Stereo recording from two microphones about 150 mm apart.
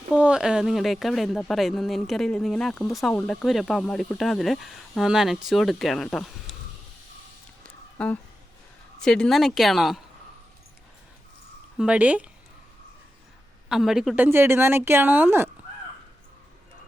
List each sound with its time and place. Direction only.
0.1 s speech: 5° right (ahead or behind)
7.9 s speech: 10° left (ahead or behind)
11.8 s speech: 10° right (ahead or behind)
13.7 s speech: 5° right (ahead or behind)
14.2 s speech: 15° right (ahead or behind)